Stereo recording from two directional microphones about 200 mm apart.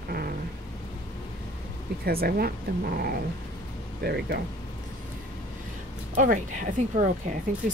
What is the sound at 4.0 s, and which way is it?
Speech, 55° right (ahead or behind).